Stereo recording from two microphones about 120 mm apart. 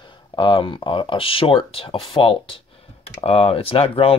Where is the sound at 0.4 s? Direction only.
45° left (ahead or behind).